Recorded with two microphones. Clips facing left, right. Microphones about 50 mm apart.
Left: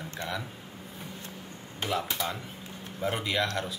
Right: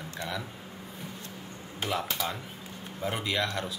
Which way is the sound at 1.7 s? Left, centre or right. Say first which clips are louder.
Left 1 dB; centre.